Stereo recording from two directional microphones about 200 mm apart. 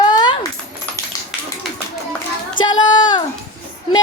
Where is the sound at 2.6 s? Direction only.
20° left (ahead or behind).